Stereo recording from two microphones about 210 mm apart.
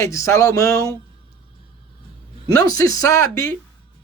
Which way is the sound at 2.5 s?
15° left (ahead or behind).